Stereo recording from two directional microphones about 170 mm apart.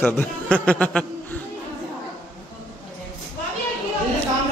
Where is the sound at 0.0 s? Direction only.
10° left (ahead or behind).